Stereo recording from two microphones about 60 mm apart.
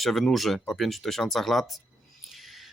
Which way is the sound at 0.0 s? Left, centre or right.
Centre.